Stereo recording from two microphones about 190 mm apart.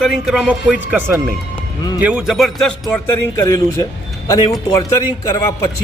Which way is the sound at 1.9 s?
5° right (ahead or behind).